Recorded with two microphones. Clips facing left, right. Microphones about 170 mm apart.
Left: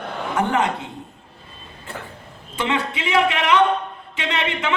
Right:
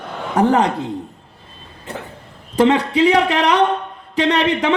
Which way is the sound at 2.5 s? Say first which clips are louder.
Right 10 dB; 35° right (ahead or behind).